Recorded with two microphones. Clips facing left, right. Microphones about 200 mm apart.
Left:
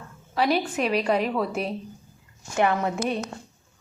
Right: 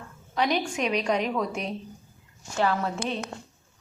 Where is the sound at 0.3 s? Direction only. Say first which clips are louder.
Left 3 dB; 5° left (ahead or behind).